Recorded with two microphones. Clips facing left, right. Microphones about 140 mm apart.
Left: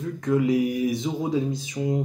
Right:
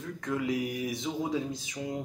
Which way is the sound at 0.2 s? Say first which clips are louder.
Left 9 dB; 10° left (ahead or behind).